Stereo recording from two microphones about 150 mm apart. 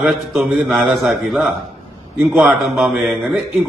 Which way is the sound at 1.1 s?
20° right (ahead or behind).